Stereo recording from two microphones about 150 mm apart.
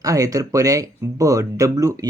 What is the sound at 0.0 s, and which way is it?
Speech, 25° right (ahead or behind).